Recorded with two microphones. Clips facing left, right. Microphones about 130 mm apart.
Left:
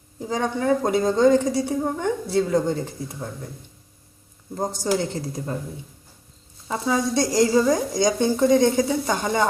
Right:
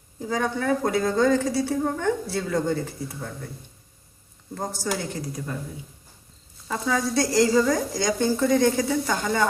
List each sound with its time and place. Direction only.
0.2 s speech: 20° left (ahead or behind)
4.5 s a woman's voice: 20° left (ahead or behind)
6.7 s speech: 20° left (ahead or behind)